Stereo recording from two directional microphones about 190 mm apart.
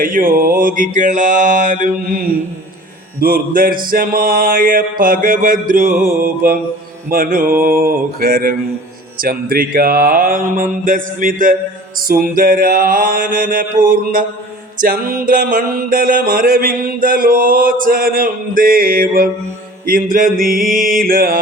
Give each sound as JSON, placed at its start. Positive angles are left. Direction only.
{"t": 0.0, "sound": "music", "side_deg": -45}
{"t": 3.2, "sound": "music", "side_deg": -50}